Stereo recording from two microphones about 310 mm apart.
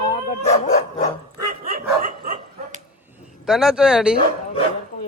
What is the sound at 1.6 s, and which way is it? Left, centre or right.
Dog, right.